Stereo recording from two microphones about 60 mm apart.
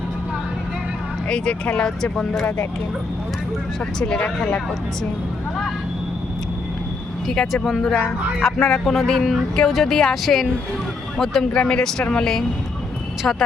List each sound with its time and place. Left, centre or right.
1.3 s speech: centre
4.0 s speech: centre
7.3 s speech: centre